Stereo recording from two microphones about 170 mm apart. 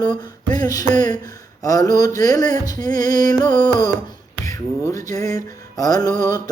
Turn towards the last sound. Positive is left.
turn(degrees=20)  # may be behind; listen again after turning